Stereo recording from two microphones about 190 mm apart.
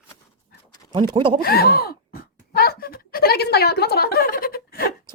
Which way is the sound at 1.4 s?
55° left (ahead or behind).